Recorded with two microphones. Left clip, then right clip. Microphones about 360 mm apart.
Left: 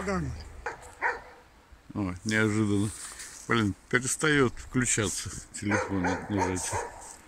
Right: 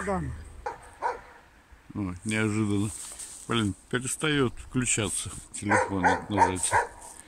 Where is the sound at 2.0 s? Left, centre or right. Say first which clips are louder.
Left 2 dB; centre.